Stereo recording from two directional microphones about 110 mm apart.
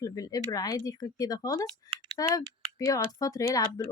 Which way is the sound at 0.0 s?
30° left (ahead or behind).